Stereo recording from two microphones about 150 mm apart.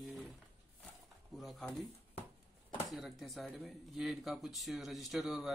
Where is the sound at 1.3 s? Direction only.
Centre (ahead or behind).